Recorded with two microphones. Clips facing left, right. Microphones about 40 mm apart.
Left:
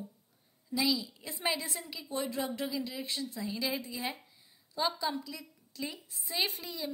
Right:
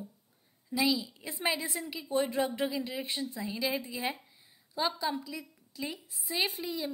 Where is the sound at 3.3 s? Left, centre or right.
Centre.